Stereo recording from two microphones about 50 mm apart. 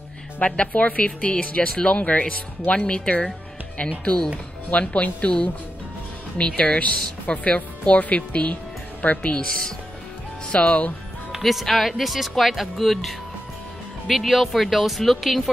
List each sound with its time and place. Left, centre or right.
0.5 s speech: left
4.6 s speech: left
9.3 s speech: centre
10.5 s speech: left
11.4 s speech: centre